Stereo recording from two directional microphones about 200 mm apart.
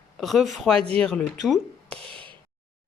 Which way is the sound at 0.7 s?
30° right (ahead or behind).